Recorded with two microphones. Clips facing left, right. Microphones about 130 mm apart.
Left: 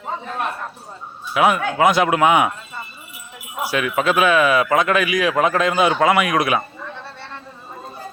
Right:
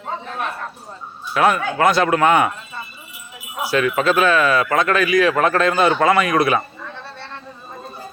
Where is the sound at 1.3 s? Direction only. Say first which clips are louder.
Even; 10° left (ahead or behind).